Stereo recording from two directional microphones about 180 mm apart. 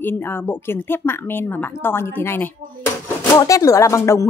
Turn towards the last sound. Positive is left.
turn(degrees=15)  # may be behind; listen again after turning